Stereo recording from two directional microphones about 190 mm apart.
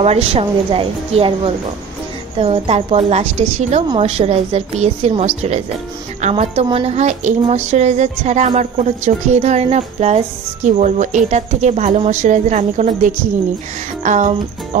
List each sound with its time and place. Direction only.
0.0 s a woman's voice: 35° right (ahead or behind)